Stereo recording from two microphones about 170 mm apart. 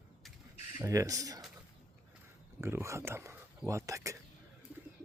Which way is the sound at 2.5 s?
15° right (ahead or behind).